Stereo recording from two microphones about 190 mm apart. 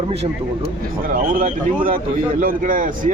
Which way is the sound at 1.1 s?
45° right (ahead or behind).